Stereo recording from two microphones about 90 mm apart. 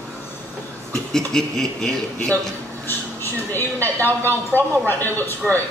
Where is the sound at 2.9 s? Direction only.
25° left (ahead or behind).